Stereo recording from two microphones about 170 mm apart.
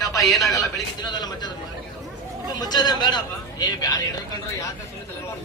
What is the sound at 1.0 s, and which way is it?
Speech, 25° left (ahead or behind).